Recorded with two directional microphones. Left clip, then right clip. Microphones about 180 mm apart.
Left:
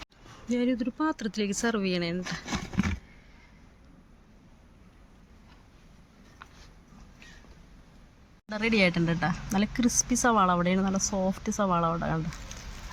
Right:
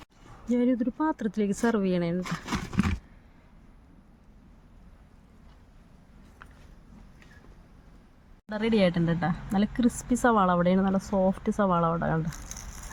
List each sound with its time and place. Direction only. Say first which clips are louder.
0.4 s speech: right 2 dB; 55° right (ahead or behind)
2.2 s a sound: right 1 dB; 30° right (ahead or behind)
8.4 s speech: even; 15° right (ahead or behind)